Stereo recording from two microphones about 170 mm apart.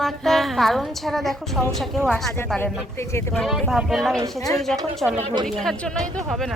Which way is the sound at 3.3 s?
Centre (ahead or behind).